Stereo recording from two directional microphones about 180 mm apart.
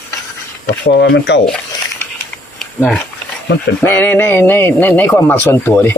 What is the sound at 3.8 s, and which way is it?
Speech, 10° left (ahead or behind).